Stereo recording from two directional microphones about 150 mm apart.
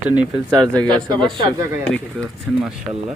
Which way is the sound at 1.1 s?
30° right (ahead or behind).